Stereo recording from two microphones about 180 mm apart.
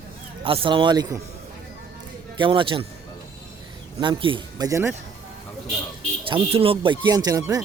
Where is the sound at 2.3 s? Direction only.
25° right (ahead or behind).